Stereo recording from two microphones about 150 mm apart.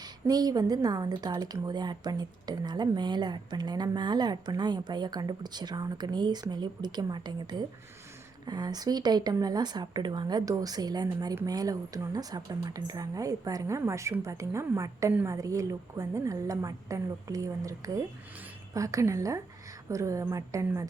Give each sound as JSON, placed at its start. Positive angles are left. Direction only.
{"t": 0.0, "sound": "speech", "side_deg": -25}